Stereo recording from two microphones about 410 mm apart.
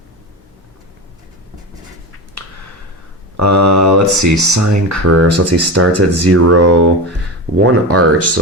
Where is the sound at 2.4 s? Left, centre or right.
Right.